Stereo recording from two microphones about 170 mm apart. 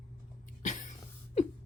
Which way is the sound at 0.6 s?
45° left (ahead or behind).